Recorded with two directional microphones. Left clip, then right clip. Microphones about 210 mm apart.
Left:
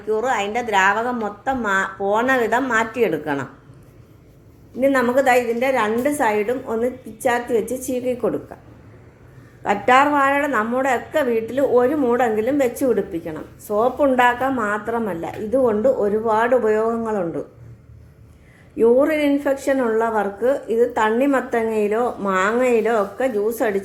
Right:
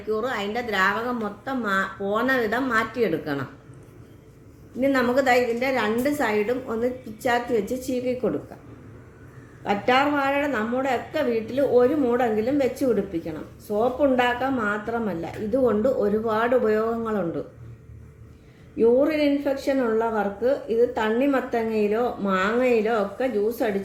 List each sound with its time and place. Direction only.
0.1 s a woman's voice: centre (ahead or behind)
4.8 s a woman's voice: centre (ahead or behind)
9.6 s a woman's voice: centre (ahead or behind)
18.8 s a woman's voice: 15° left (ahead or behind)